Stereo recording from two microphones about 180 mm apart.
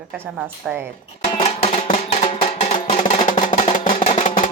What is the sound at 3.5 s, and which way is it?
Music, 40° left (ahead or behind).